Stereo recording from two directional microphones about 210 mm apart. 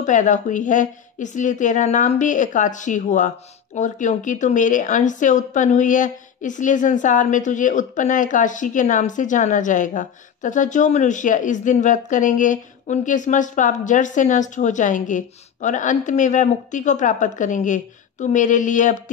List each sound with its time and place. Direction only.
0.0 s speech: 35° left (ahead or behind)